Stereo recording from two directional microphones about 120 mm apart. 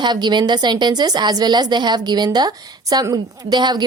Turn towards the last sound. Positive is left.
turn(degrees=-35)  # may be behind; listen again after turning